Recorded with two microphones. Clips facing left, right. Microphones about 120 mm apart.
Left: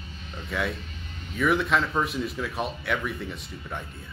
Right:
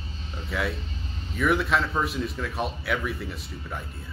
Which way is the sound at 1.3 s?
Centre (ahead or behind).